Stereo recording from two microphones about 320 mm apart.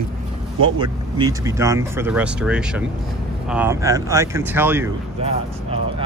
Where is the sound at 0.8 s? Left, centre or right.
Centre.